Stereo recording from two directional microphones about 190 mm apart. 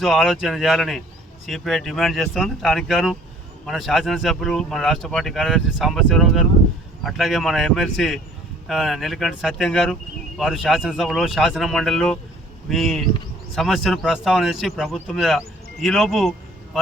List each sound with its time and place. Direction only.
0.0 s speech: centre (ahead or behind)